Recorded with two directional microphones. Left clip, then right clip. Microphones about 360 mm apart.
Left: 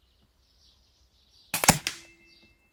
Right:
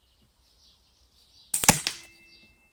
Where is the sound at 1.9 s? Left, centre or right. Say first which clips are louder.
Right 2 dB; right.